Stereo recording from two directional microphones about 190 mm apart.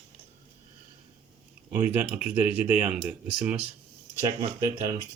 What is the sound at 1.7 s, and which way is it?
Speech, 10° right (ahead or behind).